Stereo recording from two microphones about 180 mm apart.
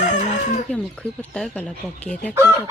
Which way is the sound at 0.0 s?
40° left (ahead or behind).